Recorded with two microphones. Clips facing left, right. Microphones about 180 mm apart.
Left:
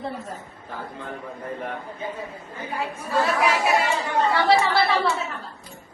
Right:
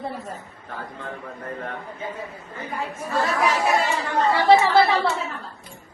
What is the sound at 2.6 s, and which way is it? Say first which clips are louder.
Speech: left 1 dB; 10° left (ahead or behind).